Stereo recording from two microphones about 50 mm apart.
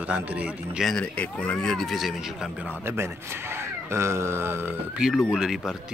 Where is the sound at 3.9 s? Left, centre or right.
Right.